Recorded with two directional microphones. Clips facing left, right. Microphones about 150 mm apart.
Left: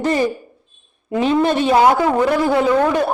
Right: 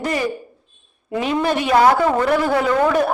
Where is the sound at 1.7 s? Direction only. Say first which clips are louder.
Right 1 dB; 10° left (ahead or behind).